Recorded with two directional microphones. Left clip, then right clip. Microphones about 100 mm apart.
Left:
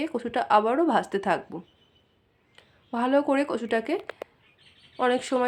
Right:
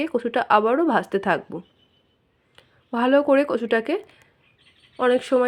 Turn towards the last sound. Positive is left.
turn(degrees=-30)  # may be behind; listen again after turning